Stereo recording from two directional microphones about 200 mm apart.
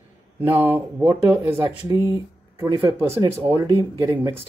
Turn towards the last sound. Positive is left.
turn(degrees=-15)  # may be behind; listen again after turning